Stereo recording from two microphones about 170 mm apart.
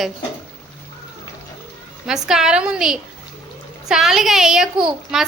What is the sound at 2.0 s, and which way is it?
A woman's voice, 5° right (ahead or behind).